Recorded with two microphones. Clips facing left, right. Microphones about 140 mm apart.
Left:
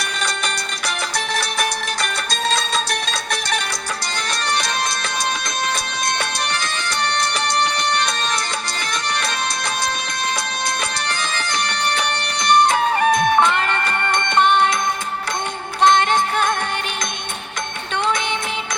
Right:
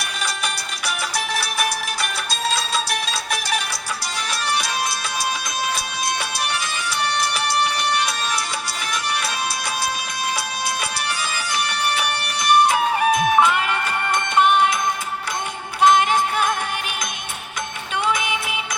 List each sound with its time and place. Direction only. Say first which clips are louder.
1.1 s music: left 1 dB; 5° right (ahead or behind)
6.1 s music: left 2 dB; 5° right (ahead or behind)
11.1 s music: left 1 dB; 5° right (ahead or behind)
15.8 s music: even; 5° right (ahead or behind)
18.1 s music: left 1 dB; 5° right (ahead or behind)